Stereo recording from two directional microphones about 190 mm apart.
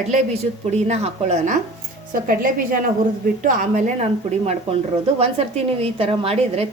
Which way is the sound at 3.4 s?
40° right (ahead or behind).